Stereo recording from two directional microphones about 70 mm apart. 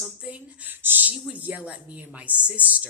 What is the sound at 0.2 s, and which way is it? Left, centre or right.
Speech, centre.